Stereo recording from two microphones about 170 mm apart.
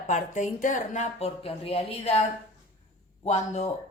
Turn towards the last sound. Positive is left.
turn(degrees=40)  # may be behind; listen again after turning